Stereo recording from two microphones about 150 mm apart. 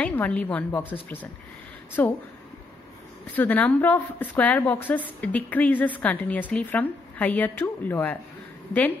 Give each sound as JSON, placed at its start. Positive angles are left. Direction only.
{"t": 0.0, "sound": "a woman's voice", "side_deg": 10}
{"t": 3.3, "sound": "a woman's voice", "side_deg": 10}